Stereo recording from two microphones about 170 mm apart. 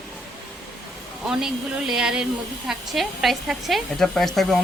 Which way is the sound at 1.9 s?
5° right (ahead or behind).